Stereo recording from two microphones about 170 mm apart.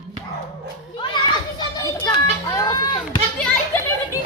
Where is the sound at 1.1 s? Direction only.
25° left (ahead or behind).